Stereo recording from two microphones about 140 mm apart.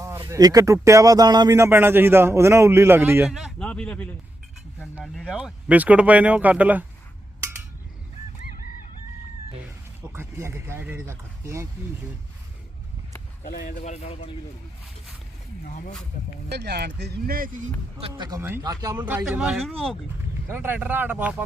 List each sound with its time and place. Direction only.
0.0 s speech: 20° right (ahead or behind)
1.5 s a man's voice: 15° right (ahead or behind)
3.3 s a man's voice: centre (ahead or behind)
10.3 s speech: 20° right (ahead or behind)
13.4 s speech: 85° left
13.8 s speech: 50° left (ahead or behind)
17.2 s speech: 90° right
17.9 s speech: 45° right (ahead or behind)
18.6 s speech: 25° right (ahead or behind)
18.9 s a man's voice: 15° right (ahead or behind); by 20.0 s centre (ahead or behind)
20.5 s a man's voice: 15° right (ahead or behind)